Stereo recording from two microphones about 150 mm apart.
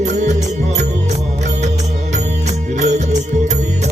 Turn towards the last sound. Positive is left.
turn(degrees=-50)  # may be behind; listen again after turning